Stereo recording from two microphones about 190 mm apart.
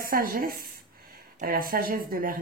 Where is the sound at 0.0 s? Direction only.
50° right (ahead or behind).